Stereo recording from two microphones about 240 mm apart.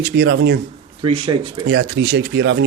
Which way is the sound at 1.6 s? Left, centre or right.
Right.